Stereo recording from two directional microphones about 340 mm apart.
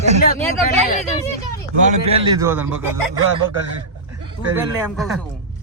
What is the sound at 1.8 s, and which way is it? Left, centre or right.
A man's voice, centre.